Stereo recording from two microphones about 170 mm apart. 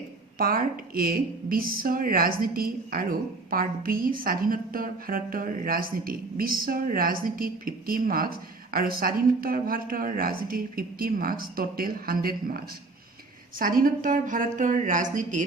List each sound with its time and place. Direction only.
0.3 s a woman's voice: 60° right (ahead or behind)